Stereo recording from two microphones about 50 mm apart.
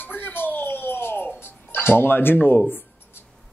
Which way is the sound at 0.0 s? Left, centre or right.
Left.